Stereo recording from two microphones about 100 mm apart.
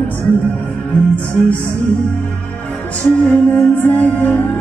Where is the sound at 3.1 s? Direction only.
10° left (ahead or behind).